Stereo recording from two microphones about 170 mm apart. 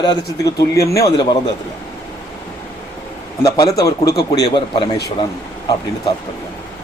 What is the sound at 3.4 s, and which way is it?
Speech, 20° left (ahead or behind).